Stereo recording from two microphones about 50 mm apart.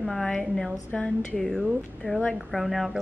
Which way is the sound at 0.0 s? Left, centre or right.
Centre.